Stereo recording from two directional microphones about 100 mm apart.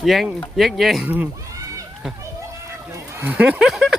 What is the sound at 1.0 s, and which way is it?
Speech, 15° right (ahead or behind).